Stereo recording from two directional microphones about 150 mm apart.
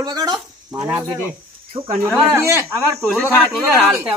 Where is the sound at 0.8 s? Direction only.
10° right (ahead or behind).